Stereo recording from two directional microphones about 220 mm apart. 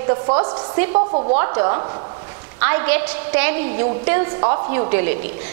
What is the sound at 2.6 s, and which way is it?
A woman's voice, 15° right (ahead or behind).